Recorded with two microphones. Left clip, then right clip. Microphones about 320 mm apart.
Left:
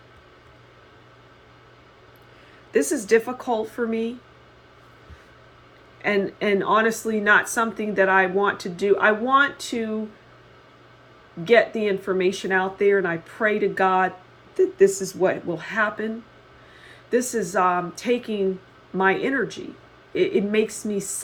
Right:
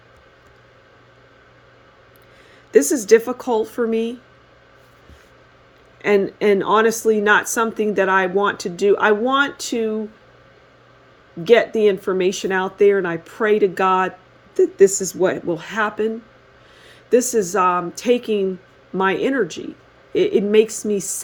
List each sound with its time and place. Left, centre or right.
2.7 s speech: right
6.0 s speech: right
11.4 s speech: right
14.8 s speech: right
15.2 s speech: right
17.1 s speech: right